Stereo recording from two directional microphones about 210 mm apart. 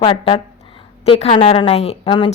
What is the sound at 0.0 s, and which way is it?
A woman's voice, 25° left (ahead or behind).